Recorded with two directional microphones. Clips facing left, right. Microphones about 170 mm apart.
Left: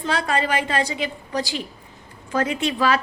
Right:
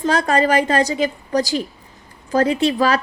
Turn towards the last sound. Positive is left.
turn(degrees=-40)  # may be behind; listen again after turning